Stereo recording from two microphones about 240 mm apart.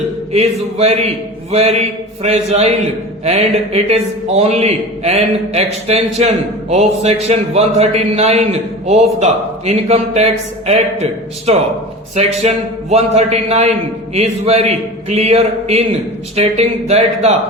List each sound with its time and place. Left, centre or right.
0.3 s a man's voice: right